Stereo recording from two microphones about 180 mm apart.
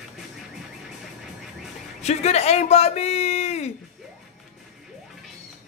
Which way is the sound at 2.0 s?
35° left (ahead or behind).